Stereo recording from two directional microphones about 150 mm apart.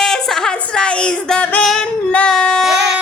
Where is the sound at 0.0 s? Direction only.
5° left (ahead or behind).